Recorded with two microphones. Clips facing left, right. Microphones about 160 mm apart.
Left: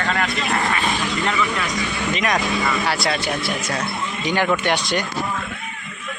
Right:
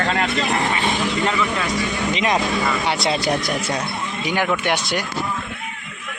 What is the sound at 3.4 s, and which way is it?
Speech, 30° right (ahead or behind).